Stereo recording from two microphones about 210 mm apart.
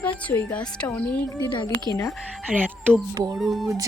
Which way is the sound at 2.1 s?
5° right (ahead or behind).